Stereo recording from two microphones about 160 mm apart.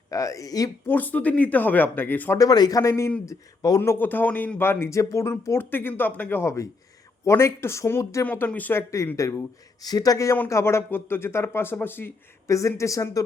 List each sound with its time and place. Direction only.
0.1 s speech: 20° left (ahead or behind)
0.9 s speech: 10° left (ahead or behind)
2.4 s speech: 25° left (ahead or behind)